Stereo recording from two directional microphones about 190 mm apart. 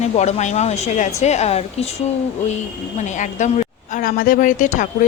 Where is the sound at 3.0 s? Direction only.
40° left (ahead or behind).